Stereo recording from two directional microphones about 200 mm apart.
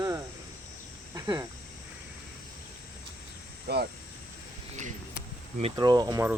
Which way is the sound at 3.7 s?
55° right (ahead or behind).